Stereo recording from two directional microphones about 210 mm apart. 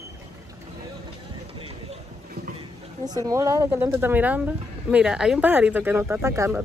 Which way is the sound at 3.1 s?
15° right (ahead or behind).